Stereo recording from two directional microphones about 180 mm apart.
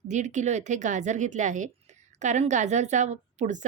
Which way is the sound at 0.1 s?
40° right (ahead or behind).